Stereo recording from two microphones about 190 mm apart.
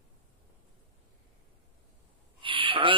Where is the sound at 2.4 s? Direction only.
25° right (ahead or behind).